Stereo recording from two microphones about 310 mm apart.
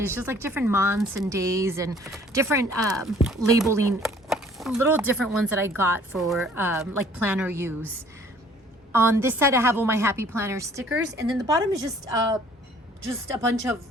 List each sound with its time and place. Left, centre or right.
0.0 s a woman's voice: centre
8.9 s a woman's voice: centre